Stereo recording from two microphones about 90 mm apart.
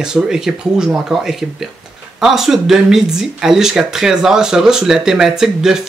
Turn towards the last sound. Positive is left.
turn(degrees=-5)  # may be behind; listen again after turning